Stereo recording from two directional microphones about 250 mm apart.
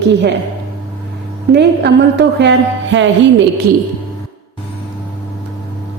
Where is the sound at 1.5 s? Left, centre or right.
Right.